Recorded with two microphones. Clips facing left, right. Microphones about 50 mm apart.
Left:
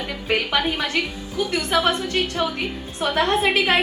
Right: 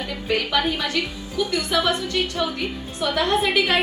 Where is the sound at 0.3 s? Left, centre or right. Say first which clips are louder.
Even; left.